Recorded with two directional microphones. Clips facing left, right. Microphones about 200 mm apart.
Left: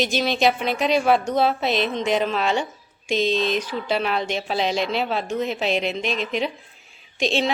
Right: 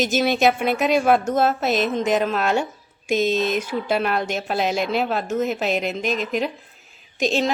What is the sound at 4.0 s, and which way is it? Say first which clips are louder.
Speech: right 1 dB; 5° right (ahead or behind).